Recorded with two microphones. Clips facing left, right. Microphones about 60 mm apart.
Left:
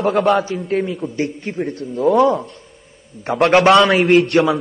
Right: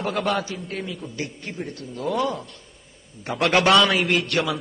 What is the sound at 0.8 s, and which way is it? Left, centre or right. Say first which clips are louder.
Speech: left 11 dB; left.